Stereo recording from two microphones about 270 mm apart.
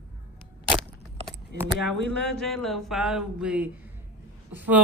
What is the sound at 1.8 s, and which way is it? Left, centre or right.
Speech, centre.